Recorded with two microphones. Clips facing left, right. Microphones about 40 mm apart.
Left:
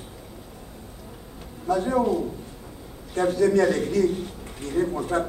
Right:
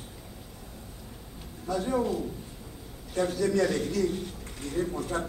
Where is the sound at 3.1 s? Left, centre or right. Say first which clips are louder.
Left 6 dB; left.